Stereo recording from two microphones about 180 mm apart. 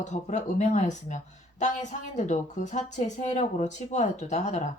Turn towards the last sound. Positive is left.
turn(degrees=40)  # may be behind; listen again after turning